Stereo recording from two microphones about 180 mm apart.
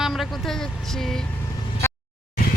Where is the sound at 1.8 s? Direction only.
15° left (ahead or behind).